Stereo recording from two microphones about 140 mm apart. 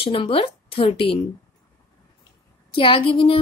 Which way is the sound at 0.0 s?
40° left (ahead or behind).